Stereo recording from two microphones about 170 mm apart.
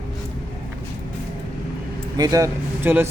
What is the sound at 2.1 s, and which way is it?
Speech, 20° right (ahead or behind).